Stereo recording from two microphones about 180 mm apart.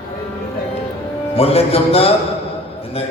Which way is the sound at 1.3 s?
35° left (ahead or behind).